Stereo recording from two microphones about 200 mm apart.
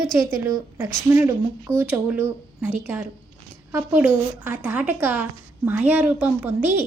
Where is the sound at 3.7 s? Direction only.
10° right (ahead or behind).